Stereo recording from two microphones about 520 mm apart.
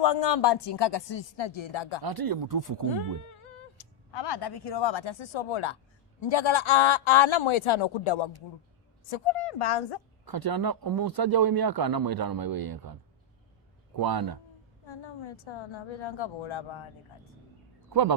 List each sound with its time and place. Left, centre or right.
0.0 s speech: left
2.0 s speech: right
3.2 s a man's voice: left
9.5 s a woman's voice: left
10.2 s speech: right
14.0 s a man's voice: right
14.8 s a man's voice: left
17.8 s a sound: right